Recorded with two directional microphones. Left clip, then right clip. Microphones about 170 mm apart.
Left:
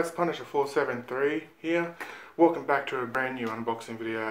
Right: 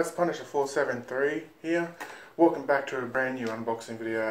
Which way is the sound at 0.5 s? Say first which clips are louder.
Even; 10° right (ahead or behind).